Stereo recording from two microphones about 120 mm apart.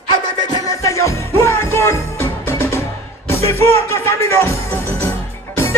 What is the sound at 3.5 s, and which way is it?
Speech, 20° left (ahead or behind).